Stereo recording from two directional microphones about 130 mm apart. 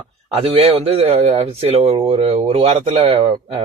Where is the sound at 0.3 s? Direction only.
50° right (ahead or behind).